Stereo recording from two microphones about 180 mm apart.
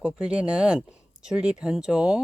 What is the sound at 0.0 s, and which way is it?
Speech, 5° right (ahead or behind).